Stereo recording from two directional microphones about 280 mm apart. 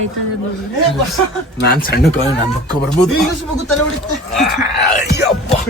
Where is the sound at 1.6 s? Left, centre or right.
Left.